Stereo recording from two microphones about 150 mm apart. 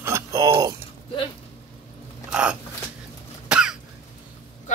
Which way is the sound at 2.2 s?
5° right (ahead or behind).